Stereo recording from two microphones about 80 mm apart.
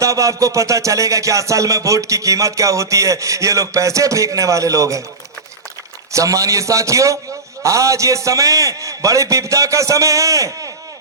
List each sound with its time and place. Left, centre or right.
0.0 s music: right
6.1 s music: right
7.6 s a man's voice: right